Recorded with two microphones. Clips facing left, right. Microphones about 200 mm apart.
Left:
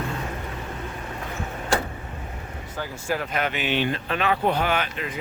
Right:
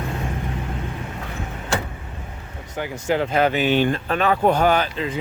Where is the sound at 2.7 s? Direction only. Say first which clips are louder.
Right 6 dB; 20° right (ahead or behind).